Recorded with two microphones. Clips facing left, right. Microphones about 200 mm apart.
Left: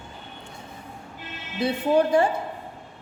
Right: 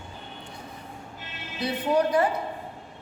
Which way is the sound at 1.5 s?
25° left (ahead or behind).